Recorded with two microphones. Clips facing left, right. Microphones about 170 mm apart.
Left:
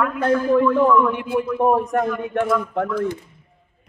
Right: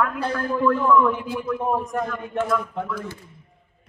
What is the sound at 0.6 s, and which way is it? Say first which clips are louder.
Speech: left 2 dB; centre (ahead or behind).